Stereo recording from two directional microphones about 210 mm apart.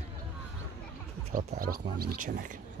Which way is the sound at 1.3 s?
40° right (ahead or behind).